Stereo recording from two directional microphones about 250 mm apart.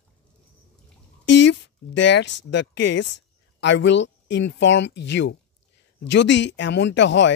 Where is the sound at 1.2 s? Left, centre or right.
Left.